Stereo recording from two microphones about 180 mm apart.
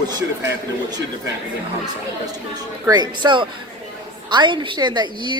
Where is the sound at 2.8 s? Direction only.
25° right (ahead or behind).